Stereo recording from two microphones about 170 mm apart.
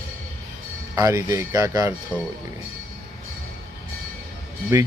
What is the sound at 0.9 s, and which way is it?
Speech, 20° right (ahead or behind).